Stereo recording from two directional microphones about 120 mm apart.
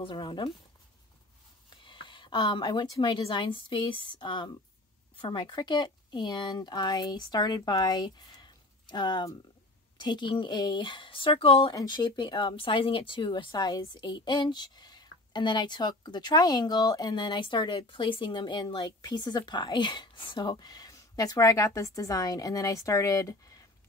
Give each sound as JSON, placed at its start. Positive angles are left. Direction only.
{"t": 0.0, "sound": "speech", "side_deg": 40}
{"t": 1.9, "sound": "speech", "side_deg": 40}
{"t": 11.7, "sound": "speech", "side_deg": 35}